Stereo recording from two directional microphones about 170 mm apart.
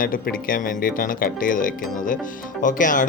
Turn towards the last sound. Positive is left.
turn(degrees=50)  # may be behind; listen again after turning